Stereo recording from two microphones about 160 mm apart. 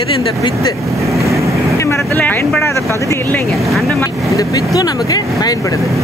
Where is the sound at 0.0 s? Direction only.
35° left (ahead or behind).